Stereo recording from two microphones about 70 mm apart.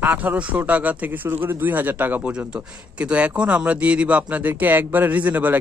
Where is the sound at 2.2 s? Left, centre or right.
Centre.